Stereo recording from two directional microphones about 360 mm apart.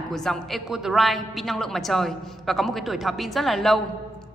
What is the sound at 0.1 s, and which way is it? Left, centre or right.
A woman's voice, centre.